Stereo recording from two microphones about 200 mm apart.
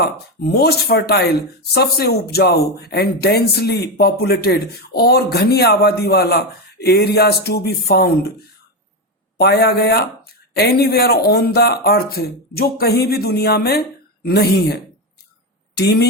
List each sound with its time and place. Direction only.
0.0 s speech: 50° left (ahead or behind)
9.4 s speech: 55° left (ahead or behind)